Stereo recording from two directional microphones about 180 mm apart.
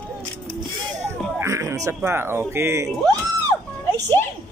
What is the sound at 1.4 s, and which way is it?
Speech, 15° right (ahead or behind).